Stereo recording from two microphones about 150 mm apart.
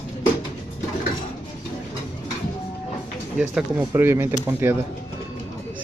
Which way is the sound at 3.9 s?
15° right (ahead or behind).